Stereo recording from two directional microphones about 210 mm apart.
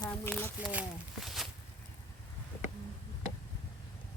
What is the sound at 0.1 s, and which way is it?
Speech, 5° left (ahead or behind).